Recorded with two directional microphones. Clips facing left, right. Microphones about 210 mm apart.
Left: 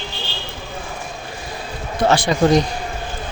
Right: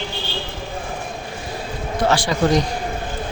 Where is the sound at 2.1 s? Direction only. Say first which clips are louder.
Left 4 dB; 20° left (ahead or behind).